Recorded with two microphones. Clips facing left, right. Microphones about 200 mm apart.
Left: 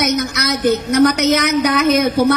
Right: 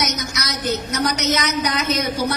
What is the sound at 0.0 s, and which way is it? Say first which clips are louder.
A woman's voice: left 8 dB; 55° left (ahead or behind).